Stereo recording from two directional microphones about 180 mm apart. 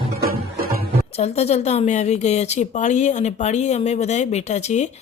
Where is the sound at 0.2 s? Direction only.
60° right (ahead or behind).